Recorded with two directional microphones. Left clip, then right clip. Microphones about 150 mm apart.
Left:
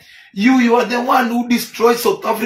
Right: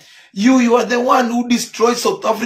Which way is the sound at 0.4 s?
20° right (ahead or behind).